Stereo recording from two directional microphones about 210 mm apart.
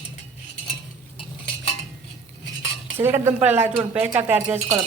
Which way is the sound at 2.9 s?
10° right (ahead or behind).